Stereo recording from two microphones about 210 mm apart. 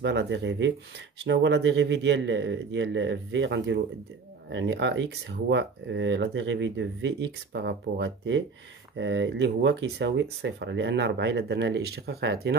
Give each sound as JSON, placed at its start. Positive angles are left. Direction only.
{"t": 0.0, "sound": "speech", "side_deg": -55}